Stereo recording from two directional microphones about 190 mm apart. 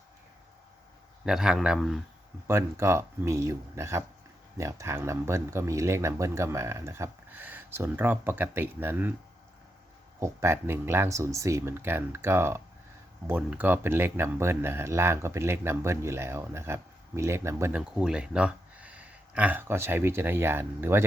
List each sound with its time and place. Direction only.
1.2 s a man's voice: 5° right (ahead or behind)
2.5 s speech: 15° right (ahead or behind)
10.2 s speech: 15° right (ahead or behind)